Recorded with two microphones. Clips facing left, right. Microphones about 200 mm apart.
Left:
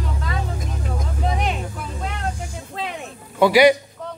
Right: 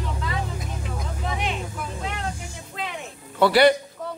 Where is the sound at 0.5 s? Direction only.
40° left (ahead or behind).